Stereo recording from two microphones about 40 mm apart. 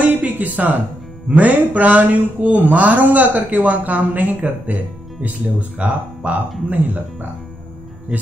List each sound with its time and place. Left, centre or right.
0.0 s a sound: right
1.3 s speech: right
5.8 s speech: right
6.7 s speech: right